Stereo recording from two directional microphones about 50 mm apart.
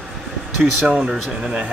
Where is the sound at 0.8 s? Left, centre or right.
Right.